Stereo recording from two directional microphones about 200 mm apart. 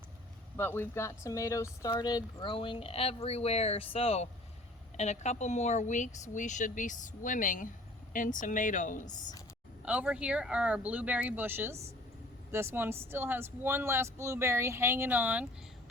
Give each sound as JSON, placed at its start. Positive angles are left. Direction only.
{"t": 0.5, "sound": "speech", "side_deg": 10}
{"t": 9.8, "sound": "speech", "side_deg": -5}